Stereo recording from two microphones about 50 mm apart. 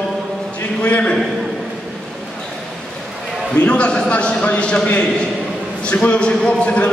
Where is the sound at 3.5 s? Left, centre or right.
Left.